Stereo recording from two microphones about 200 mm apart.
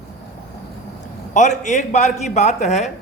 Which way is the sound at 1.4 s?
35° left (ahead or behind).